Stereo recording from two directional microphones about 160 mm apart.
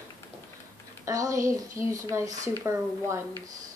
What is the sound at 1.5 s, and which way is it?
Speech, 20° right (ahead or behind).